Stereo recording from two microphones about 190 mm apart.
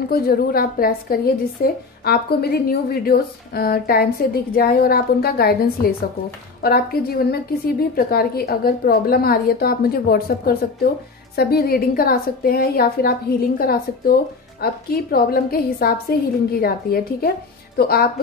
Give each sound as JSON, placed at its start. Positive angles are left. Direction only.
{"t": 0.1, "sound": "a woman's voice", "side_deg": 50}